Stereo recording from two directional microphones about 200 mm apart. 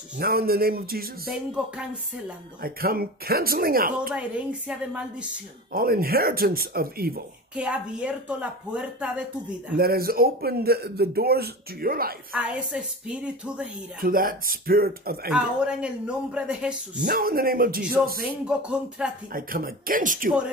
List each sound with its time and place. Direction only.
0.2 s speech: 50° right (ahead or behind)
1.5 s a man's voice: 5° right (ahead or behind)
2.6 s speech: 50° right (ahead or behind)
4.1 s a man's voice: 5° right (ahead or behind)
5.7 s speech: 45° right (ahead or behind)
7.5 s a man's voice: 5° right (ahead or behind)
9.8 s speech: 50° right (ahead or behind)
12.4 s a man's voice: 5° right (ahead or behind)
14.0 s speech: 45° right (ahead or behind)
15.3 s a man's voice: 5° right (ahead or behind)
17.0 s speech: 45° right (ahead or behind)
18.2 s a man's voice: 5° right (ahead or behind)
19.3 s speech: 45° right (ahead or behind)